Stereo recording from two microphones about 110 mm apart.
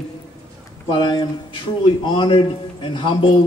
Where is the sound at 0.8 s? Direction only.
45° left (ahead or behind).